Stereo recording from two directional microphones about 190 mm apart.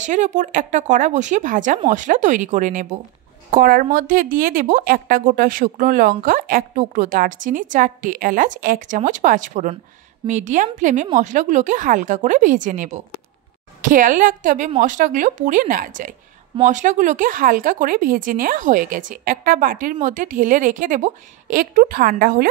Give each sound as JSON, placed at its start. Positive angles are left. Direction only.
{"t": 0.0, "sound": "a woman's voice", "side_deg": -40}